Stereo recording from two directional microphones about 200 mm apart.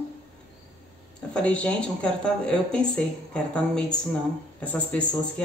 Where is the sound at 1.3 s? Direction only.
5° left (ahead or behind).